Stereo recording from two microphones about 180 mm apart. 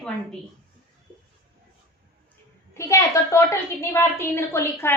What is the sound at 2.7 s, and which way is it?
A woman's voice, 15° left (ahead or behind).